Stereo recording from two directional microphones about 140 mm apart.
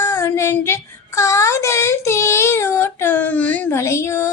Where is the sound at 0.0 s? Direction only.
15° left (ahead or behind).